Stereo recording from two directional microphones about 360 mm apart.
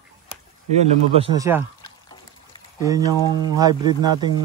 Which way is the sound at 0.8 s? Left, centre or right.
Centre.